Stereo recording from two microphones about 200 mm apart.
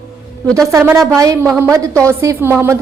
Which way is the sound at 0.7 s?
15° right (ahead or behind).